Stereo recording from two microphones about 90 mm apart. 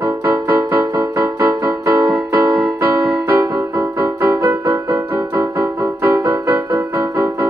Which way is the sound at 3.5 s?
40° right (ahead or behind).